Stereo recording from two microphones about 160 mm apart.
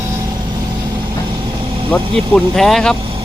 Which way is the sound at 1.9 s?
5° left (ahead or behind).